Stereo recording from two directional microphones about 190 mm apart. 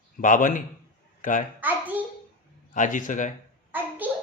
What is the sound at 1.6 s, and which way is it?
Speech, 10° right (ahead or behind).